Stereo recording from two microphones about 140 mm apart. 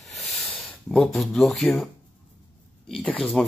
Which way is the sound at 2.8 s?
5° left (ahead or behind).